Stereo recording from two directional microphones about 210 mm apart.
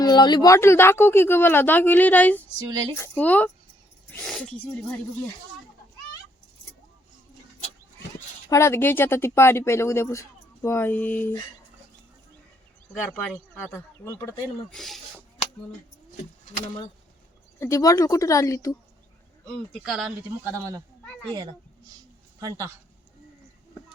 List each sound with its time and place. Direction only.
0.0 s speech: 20° left (ahead or behind); by 4.9 s 5° left (ahead or behind)
8.4 s speech: 15° left (ahead or behind)
13.0 s speech: 5° left (ahead or behind)
14.7 s speech: centre (ahead or behind)
17.6 s speech: 15° left (ahead or behind)
19.5 s speech: centre (ahead or behind)
22.4 s speech: 15° right (ahead or behind)